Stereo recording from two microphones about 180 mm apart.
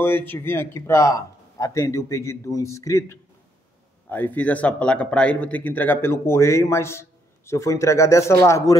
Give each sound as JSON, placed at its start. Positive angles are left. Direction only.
{"t": 0.0, "sound": "speech", "side_deg": 10}